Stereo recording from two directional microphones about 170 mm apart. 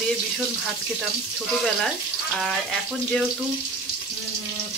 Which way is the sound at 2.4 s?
Centre (ahead or behind).